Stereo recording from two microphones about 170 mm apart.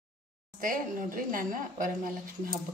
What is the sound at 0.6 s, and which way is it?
A woman's voice, 55° right (ahead or behind).